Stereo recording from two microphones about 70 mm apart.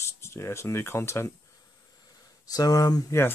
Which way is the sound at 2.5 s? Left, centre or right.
Left.